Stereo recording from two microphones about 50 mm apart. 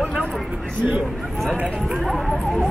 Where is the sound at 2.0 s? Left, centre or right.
Centre.